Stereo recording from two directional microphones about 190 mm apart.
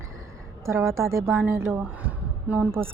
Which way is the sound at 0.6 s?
15° right (ahead or behind).